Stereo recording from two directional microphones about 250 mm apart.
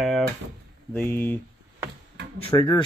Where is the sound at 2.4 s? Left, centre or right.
Centre.